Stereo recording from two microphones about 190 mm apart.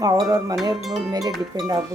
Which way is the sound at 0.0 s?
20° right (ahead or behind).